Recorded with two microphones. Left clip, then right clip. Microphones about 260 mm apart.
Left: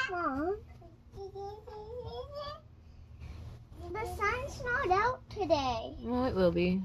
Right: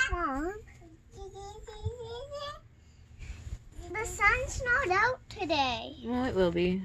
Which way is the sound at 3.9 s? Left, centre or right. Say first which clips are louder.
Right 6 dB; right.